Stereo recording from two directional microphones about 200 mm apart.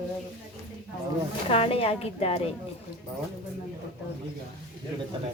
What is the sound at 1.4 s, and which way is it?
Speech, 30° left (ahead or behind).